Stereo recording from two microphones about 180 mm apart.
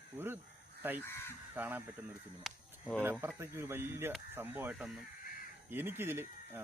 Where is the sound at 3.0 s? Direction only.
10° right (ahead or behind).